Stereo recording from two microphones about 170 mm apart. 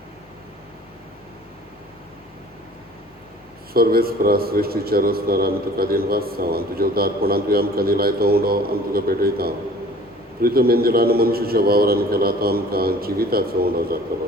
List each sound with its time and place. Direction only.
3.8 s a man's voice: 60° right (ahead or behind)